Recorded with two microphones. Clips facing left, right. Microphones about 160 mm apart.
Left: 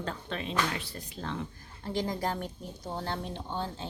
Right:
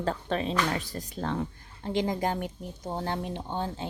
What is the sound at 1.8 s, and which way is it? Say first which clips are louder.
Speech: right 4 dB; 20° right (ahead or behind).